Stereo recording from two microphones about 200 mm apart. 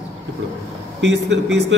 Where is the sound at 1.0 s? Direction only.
60° right (ahead or behind).